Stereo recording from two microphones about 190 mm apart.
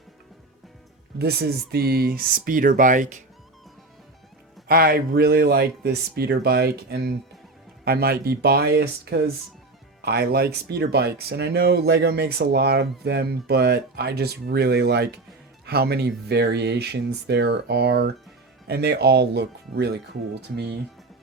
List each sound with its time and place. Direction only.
1.2 s speech: 60° right (ahead or behind); by 3.2 s 40° right (ahead or behind)
4.7 s speech: 55° right (ahead or behind)